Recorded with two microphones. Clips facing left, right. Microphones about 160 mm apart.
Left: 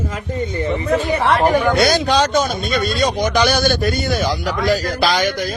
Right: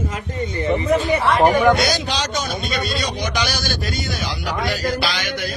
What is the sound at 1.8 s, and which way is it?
A man's voice, 55° left (ahead or behind).